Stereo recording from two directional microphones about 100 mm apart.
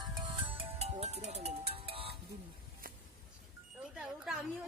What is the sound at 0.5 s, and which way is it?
Music, 80° right.